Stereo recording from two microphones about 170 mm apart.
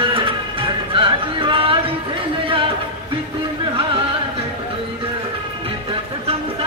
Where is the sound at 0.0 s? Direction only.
30° right (ahead or behind).